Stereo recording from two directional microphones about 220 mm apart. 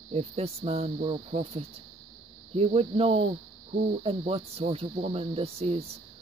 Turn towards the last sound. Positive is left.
turn(degrees=-25)  # may be behind; listen again after turning